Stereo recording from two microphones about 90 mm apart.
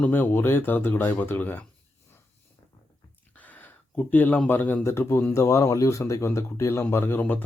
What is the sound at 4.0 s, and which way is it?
Speech, 20° left (ahead or behind).